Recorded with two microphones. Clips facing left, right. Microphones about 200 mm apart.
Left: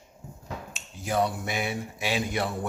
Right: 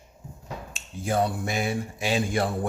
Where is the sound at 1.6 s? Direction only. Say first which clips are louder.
Right 3 dB; 30° right (ahead or behind).